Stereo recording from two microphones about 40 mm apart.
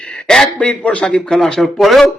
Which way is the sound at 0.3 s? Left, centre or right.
Centre.